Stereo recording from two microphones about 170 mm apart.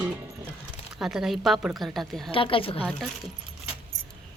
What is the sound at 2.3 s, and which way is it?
Speech, 30° left (ahead or behind).